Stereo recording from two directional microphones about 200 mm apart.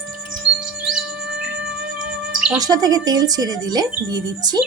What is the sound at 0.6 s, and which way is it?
Chirp, 5° right (ahead or behind).